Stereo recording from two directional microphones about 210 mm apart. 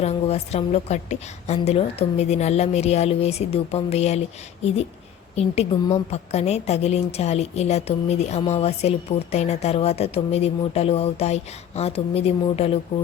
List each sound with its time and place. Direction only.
0.0 s a woman's voice: 30° left (ahead or behind)
5.4 s a woman's voice: 30° left (ahead or behind)